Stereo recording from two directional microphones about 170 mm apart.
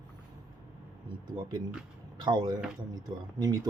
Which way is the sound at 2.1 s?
25° right (ahead or behind).